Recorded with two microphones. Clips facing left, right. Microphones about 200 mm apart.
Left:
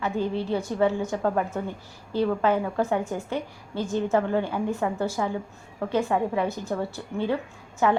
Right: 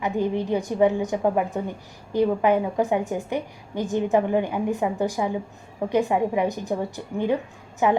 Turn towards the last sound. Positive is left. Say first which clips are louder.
# right 2 dB
turn(degrees=-15)  # may be behind; listen again after turning